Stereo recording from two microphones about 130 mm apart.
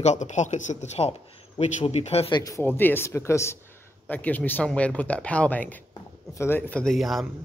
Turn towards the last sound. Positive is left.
turn(degrees=0)  # may be behind; listen again after turning